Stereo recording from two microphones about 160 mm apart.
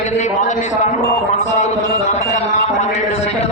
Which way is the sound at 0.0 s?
50° left (ahead or behind).